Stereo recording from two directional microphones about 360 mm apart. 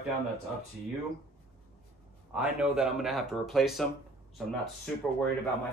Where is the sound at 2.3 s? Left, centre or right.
Centre.